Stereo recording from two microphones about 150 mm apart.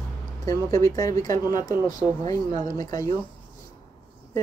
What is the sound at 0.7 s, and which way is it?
Speech, 20° left (ahead or behind).